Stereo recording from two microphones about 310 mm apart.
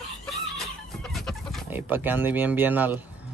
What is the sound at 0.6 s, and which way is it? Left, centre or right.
Chicken, centre.